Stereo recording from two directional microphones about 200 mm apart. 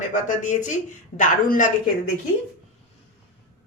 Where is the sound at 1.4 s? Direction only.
45° left (ahead or behind).